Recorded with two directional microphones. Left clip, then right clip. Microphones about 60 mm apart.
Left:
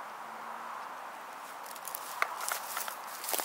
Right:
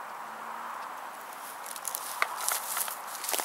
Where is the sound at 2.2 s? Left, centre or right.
Centre.